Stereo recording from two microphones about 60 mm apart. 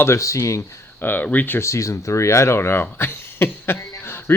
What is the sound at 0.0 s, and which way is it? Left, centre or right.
Speech, left.